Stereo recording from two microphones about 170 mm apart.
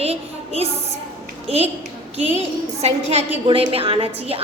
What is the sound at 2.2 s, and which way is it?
A woman's voice, 40° right (ahead or behind).